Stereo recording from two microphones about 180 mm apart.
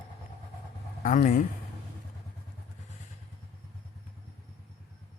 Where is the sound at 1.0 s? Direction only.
45° left (ahead or behind).